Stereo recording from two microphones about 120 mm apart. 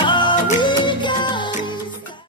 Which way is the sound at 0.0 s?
40° left (ahead or behind).